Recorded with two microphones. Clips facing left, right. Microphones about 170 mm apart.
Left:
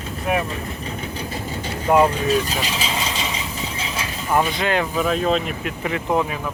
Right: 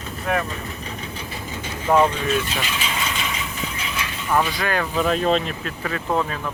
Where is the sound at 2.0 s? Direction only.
35° left (ahead or behind).